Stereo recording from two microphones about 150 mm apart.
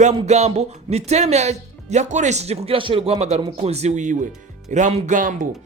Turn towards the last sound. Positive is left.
turn(degrees=-55)  # may be behind; listen again after turning